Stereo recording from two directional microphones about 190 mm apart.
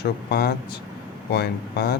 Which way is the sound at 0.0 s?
55° left (ahead or behind).